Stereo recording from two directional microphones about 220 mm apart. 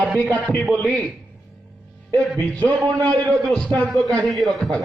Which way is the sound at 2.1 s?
5° left (ahead or behind).